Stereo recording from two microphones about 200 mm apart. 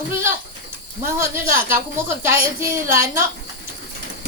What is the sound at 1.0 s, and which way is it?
A woman's voice, 10° right (ahead or behind).